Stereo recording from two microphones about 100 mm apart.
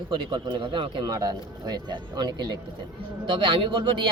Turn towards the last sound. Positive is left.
turn(degrees=-55)  # may be behind; listen again after turning